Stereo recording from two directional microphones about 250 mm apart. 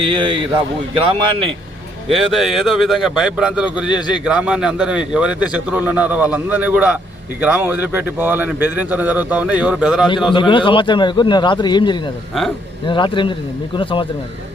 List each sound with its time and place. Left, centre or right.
0.0 s speech: centre
2.1 s a man's voice: centre
10.3 s speech: centre